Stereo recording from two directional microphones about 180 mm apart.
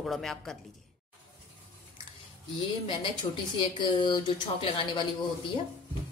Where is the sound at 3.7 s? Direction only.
25° left (ahead or behind).